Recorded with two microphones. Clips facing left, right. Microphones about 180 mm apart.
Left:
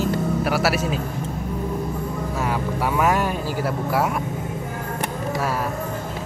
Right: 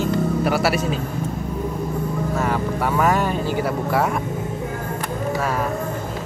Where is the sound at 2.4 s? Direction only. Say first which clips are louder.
Right 1 dB; 5° left (ahead or behind).